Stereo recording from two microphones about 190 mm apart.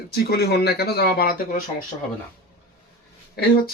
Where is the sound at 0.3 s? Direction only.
55° left (ahead or behind).